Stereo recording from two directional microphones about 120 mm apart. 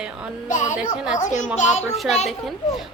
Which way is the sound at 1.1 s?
90° left.